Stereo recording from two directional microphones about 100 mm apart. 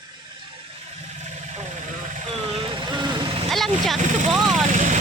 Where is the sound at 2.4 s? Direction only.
70° right (ahead or behind); by 3.3 s 50° right (ahead or behind).